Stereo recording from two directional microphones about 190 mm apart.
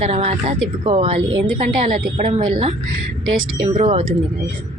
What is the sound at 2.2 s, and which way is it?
Speech, 25° right (ahead or behind).